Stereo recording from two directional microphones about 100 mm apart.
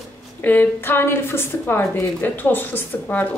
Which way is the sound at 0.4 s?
20° left (ahead or behind).